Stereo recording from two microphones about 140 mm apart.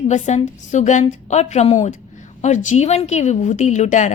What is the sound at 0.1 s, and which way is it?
A woman's voice, 60° left (ahead or behind).